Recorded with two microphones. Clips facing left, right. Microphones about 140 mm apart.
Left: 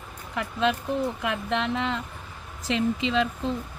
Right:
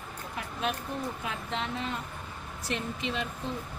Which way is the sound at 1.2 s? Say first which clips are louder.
Left 7 dB; 80° left.